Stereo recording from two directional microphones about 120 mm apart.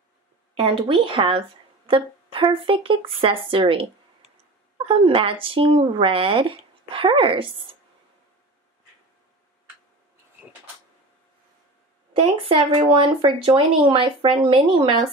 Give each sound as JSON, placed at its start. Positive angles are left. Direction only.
{"t": 0.6, "sound": "speech", "side_deg": -50}
{"t": 4.8, "sound": "speech", "side_deg": -50}
{"t": 12.2, "sound": "speech", "side_deg": -45}